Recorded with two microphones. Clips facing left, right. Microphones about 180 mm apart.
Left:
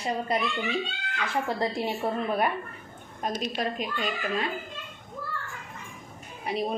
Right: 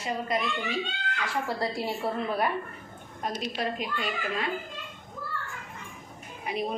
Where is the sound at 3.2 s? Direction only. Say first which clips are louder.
Left 1 dB; 20° left (ahead or behind).